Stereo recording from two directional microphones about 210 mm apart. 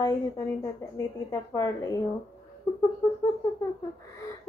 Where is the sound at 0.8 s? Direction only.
15° left (ahead or behind).